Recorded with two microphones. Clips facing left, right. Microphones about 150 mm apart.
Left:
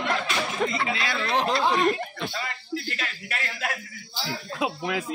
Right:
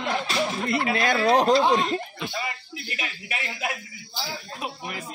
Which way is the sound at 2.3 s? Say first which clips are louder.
Left 1 dB; 15° right (ahead or behind).